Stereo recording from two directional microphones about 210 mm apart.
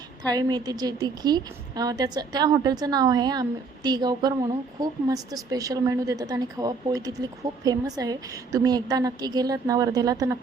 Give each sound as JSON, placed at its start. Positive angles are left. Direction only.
{"t": 0.2, "sound": "a woman's voice", "side_deg": -20}